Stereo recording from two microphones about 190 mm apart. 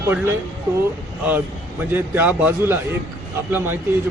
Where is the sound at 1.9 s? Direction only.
10° right (ahead or behind).